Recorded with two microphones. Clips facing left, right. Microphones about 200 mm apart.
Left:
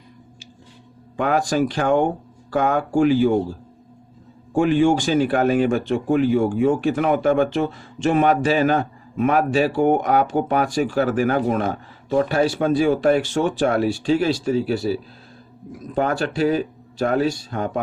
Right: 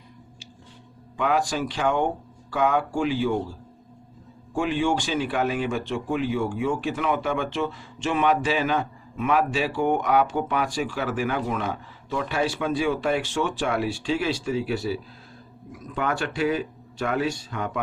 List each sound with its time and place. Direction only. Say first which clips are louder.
1.1 s speech: left 4 dB; 45° left (ahead or behind)
4.5 s speech: left 7 dB; 45° left (ahead or behind)